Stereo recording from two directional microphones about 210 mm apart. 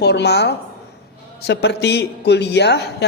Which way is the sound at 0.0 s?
50° left (ahead or behind).